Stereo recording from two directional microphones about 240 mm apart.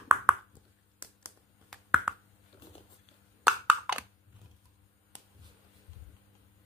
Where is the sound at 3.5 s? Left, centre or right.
Centre.